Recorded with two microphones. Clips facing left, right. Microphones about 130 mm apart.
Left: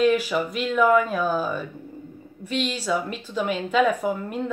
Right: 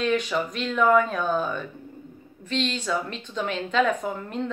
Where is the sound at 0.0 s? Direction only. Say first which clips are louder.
Left 4 dB; 5° left (ahead or behind).